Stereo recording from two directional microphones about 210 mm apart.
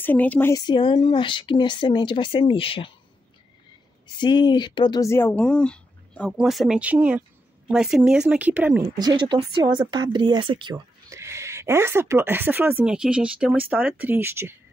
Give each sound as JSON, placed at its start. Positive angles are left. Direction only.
{"t": 0.0, "sound": "speech", "side_deg": 10}
{"t": 4.1, "sound": "speech", "side_deg": 20}
{"t": 8.9, "sound": "speech", "side_deg": -20}